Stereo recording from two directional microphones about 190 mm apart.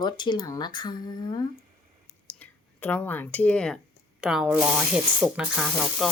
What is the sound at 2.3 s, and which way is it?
Speech, 10° left (ahead or behind).